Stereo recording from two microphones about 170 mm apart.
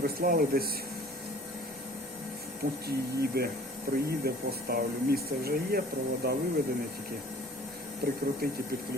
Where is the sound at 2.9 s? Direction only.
65° right (ahead or behind).